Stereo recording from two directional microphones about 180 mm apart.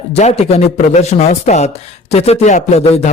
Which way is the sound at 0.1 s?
35° left (ahead or behind).